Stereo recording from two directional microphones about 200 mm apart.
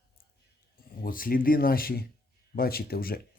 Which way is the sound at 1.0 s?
45° left (ahead or behind).